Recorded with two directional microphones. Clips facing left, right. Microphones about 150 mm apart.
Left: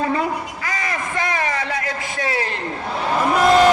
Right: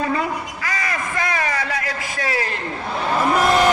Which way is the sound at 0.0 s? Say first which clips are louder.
Left 1 dB; 30° left (ahead or behind).